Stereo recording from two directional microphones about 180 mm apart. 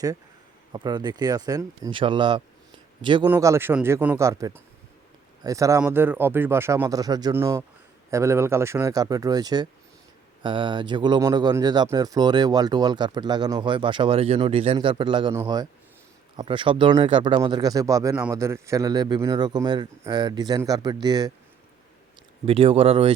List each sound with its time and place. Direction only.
0.7 s speech: 25° right (ahead or behind)
3.2 s speech: 15° right (ahead or behind)
16.4 s speech: 30° right (ahead or behind)
22.4 s speech: 30° right (ahead or behind)